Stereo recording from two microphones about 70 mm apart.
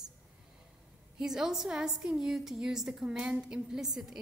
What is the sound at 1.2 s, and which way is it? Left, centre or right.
A woman's voice, centre.